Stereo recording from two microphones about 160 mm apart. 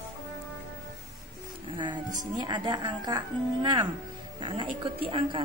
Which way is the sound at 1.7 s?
30° right (ahead or behind).